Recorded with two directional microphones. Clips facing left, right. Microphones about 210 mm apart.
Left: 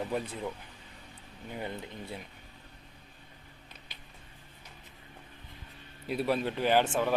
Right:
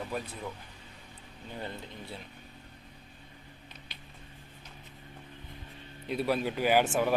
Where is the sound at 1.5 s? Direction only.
15° left (ahead or behind).